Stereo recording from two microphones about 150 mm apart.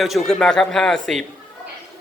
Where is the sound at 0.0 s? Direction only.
Centre (ahead or behind).